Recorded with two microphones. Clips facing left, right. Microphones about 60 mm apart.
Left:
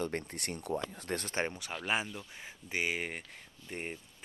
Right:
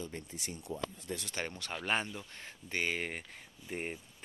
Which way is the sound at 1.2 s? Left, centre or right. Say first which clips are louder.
Left 6 dB; left.